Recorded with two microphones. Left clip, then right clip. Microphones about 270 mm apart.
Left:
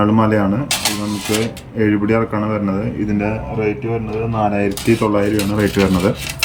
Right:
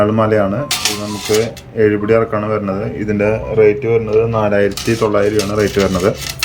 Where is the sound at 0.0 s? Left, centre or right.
Centre.